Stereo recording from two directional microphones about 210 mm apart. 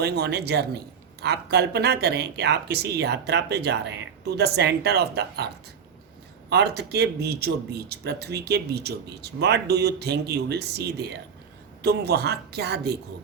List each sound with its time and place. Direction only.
0.0 s speech: 50° right (ahead or behind)
6.5 s speech: 50° right (ahead or behind)